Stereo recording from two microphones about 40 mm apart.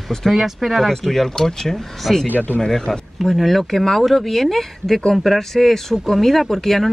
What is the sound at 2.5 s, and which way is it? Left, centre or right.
Speech, centre.